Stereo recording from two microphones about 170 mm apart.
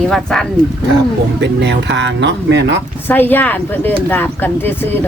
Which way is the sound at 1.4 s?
90° right.